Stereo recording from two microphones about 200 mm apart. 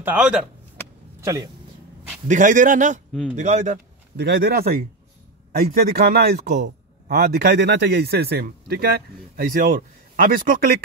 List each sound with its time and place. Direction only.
0.0 s speech: 5° right (ahead or behind)
1.2 s speech: 20° right (ahead or behind)
2.2 s a man's voice: 40° right (ahead or behind)
3.1 s speech: 5° left (ahead or behind)
3.3 s a man's voice: 35° right (ahead or behind)
4.2 s speech: 50° right (ahead or behind)